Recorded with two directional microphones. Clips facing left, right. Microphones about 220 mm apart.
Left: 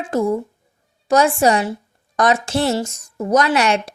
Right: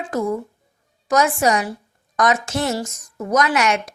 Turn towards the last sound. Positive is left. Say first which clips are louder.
# left 2 dB
turn(degrees=30)  # may be behind; listen again after turning